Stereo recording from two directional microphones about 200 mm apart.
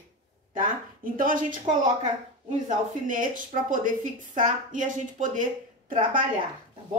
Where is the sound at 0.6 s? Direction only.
45° right (ahead or behind).